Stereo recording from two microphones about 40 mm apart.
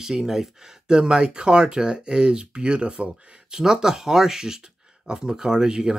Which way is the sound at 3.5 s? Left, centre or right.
Centre.